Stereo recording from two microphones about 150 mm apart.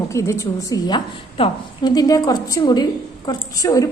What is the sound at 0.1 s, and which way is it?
A woman's voice, 20° left (ahead or behind).